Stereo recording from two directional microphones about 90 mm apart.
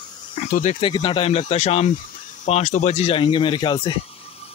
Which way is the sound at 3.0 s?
75° left (ahead or behind).